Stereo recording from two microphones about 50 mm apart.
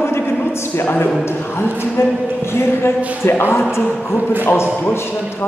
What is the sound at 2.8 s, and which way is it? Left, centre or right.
Speech, left.